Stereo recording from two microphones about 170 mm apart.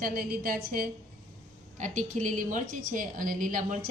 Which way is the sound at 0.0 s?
55° right (ahead or behind).